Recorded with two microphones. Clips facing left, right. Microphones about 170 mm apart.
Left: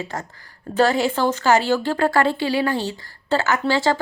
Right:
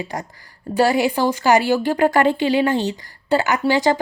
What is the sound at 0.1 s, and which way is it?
A woman's voice, 15° right (ahead or behind).